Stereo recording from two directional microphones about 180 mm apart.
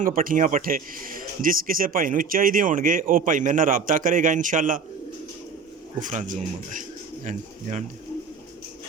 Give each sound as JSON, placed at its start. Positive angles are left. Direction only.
{"t": 0.0, "sound": "speech", "side_deg": -50}
{"t": 6.0, "sound": "speech", "side_deg": -45}